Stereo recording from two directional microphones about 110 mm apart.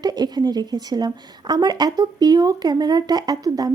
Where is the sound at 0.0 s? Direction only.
40° right (ahead or behind).